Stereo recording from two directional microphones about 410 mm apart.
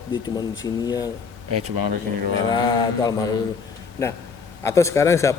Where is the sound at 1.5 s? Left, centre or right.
Right.